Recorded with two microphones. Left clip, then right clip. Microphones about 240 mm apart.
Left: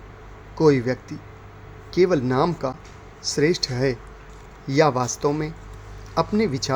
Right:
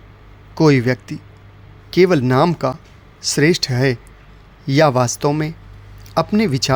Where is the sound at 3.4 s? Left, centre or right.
Right.